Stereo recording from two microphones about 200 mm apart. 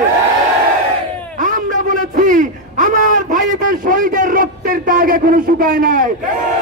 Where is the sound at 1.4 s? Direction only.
40° right (ahead or behind).